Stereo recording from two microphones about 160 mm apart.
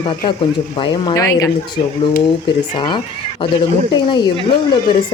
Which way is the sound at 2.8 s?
30° left (ahead or behind).